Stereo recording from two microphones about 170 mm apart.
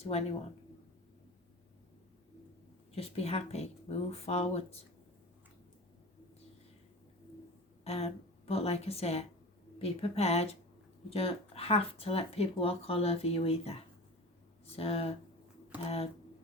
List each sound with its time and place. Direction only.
0.0 s speech: 40° left (ahead or behind)
2.9 s speech: 35° left (ahead or behind)
7.9 s speech: 35° left (ahead or behind)